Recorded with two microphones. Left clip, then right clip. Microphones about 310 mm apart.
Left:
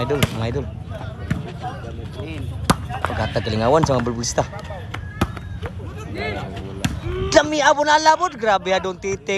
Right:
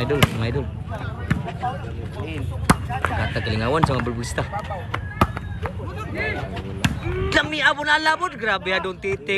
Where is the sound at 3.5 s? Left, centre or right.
Centre.